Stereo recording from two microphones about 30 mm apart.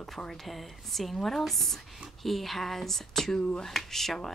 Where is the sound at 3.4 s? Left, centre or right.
Left.